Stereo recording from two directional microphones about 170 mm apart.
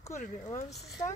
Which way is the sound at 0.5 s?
40° left (ahead or behind).